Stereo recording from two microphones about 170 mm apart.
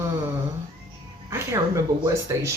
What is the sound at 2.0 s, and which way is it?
Speech, 15° right (ahead or behind).